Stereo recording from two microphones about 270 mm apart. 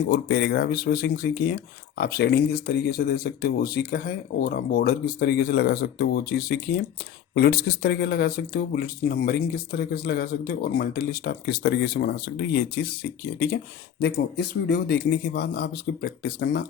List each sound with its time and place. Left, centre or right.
0.1 s speech: left
14.0 s speech: left